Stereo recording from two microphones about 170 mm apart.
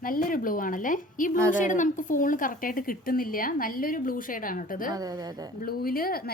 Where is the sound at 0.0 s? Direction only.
55° left (ahead or behind).